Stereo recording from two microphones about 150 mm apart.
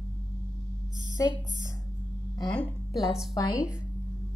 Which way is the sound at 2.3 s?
30° left (ahead or behind).